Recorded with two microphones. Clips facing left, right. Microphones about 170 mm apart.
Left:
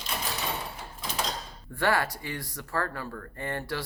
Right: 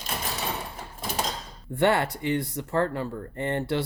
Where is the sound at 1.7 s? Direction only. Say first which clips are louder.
Right 4 dB; 25° right (ahead or behind).